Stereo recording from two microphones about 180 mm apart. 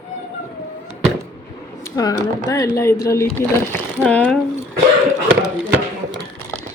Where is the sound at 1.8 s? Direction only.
20° left (ahead or behind).